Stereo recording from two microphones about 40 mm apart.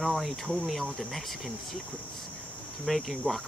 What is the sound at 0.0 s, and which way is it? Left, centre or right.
Speech, centre.